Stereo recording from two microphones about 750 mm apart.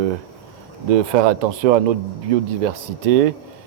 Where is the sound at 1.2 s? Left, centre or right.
Right.